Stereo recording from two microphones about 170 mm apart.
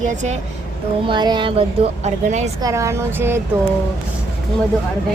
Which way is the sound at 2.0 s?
45° right (ahead or behind).